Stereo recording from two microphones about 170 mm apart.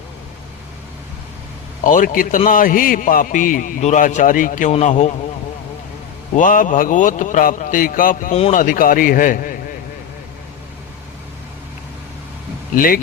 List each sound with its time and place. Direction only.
1.8 s a man's voice: 55° left (ahead or behind)
6.3 s a man's voice: 50° left (ahead or behind)
12.7 s speech: 55° left (ahead or behind)